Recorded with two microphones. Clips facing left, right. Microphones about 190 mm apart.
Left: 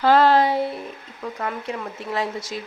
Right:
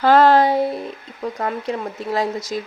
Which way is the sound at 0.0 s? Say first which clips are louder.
Right 3 dB; 50° right (ahead or behind).